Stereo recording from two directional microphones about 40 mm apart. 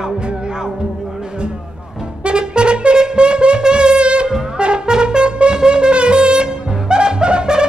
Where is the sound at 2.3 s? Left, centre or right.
Right.